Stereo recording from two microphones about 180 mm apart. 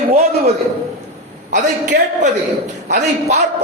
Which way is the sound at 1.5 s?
45° right (ahead or behind).